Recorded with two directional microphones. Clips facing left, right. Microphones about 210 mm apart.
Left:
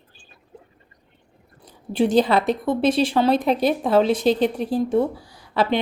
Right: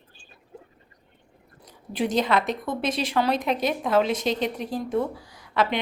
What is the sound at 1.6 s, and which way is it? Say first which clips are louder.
A woman's voice: left 6 dB; 30° left (ahead or behind).